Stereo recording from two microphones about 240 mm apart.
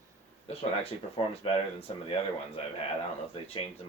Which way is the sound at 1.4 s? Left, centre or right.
Left.